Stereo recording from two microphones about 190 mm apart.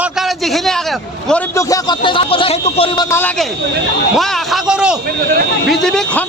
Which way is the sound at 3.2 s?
10° left (ahead or behind).